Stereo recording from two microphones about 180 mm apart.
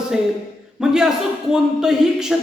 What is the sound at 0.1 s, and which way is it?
A woman's voice, centre (ahead or behind).